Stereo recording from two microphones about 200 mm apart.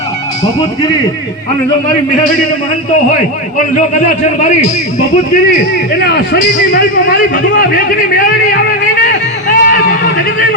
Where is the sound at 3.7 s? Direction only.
40° left (ahead or behind).